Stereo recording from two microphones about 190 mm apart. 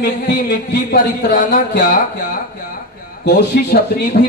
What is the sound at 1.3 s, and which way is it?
Speech, 45° left (ahead or behind).